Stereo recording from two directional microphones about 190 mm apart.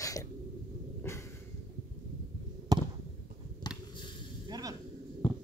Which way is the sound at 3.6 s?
20° left (ahead or behind).